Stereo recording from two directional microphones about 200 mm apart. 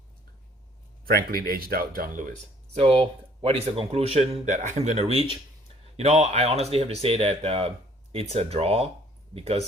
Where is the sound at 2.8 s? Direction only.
30° right (ahead or behind).